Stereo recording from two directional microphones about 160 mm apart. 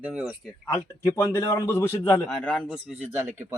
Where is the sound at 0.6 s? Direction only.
25° left (ahead or behind).